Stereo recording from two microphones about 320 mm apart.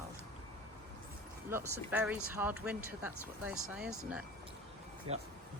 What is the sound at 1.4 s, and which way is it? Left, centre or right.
Speech, centre.